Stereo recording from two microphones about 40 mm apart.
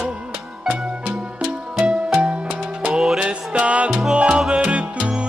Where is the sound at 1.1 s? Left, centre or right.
Right.